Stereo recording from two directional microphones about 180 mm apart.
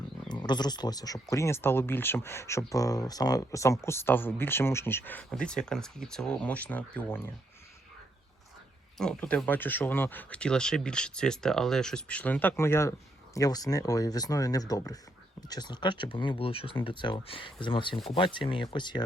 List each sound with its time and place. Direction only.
0.3 s speech: 25° left (ahead or behind)
9.0 s speech: 5° left (ahead or behind); by 19.0 s 25° left (ahead or behind)